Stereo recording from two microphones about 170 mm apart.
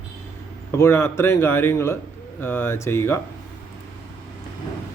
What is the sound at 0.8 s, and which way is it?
Speech, 15° left (ahead or behind).